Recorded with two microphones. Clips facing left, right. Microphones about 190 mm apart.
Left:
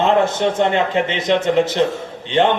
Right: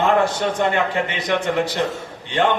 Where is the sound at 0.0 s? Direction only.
20° left (ahead or behind).